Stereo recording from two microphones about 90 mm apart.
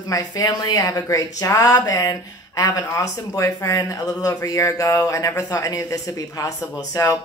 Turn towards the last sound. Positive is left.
turn(degrees=40)  # may be behind; listen again after turning